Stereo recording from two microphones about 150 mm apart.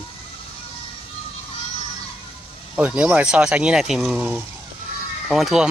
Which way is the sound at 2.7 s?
5° right (ahead or behind).